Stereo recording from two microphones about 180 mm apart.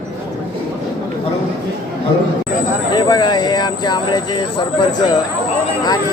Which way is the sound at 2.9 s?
25° left (ahead or behind).